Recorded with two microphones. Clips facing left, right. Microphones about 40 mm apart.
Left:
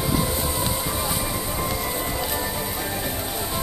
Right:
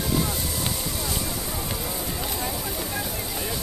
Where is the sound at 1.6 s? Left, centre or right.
Left.